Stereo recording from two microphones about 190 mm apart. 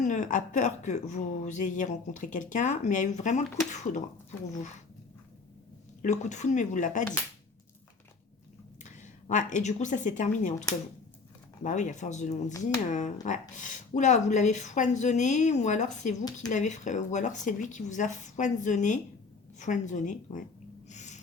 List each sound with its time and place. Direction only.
0.0 s speech: 40° left (ahead or behind)
6.0 s speech: 40° left (ahead or behind)
8.8 s speech: 40° left (ahead or behind)
11.6 s speech: 40° left (ahead or behind)
20.9 s a sound: 40° left (ahead or behind)